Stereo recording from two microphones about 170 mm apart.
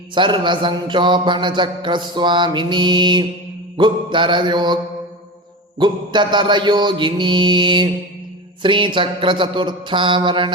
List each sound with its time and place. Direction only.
0.1 s mantra: 30° right (ahead or behind)
5.8 s mantra: 25° right (ahead or behind)